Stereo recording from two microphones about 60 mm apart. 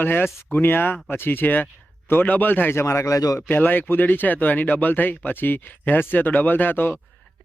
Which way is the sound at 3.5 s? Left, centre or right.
Left.